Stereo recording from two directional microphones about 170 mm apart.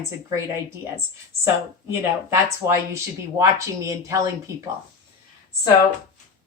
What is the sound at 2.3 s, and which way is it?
Speech, 15° right (ahead or behind).